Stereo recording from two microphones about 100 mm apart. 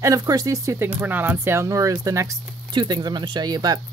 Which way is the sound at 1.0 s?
20° right (ahead or behind).